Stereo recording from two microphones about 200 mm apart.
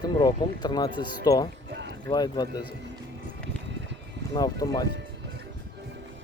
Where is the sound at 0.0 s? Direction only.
20° left (ahead or behind).